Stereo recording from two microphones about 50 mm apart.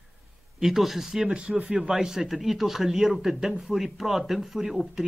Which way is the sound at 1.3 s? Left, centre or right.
Right.